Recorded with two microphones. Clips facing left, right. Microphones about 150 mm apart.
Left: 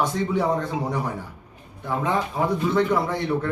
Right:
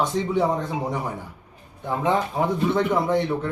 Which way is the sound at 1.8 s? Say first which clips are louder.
Right 2 dB; 20° right (ahead or behind).